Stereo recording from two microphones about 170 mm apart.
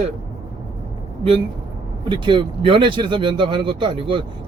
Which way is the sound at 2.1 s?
30° right (ahead or behind).